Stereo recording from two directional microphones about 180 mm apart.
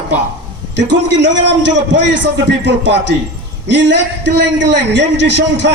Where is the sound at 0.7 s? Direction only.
75° right (ahead or behind).